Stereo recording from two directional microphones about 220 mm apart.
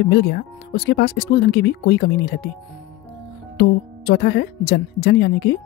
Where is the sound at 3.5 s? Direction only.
50° left (ahead or behind).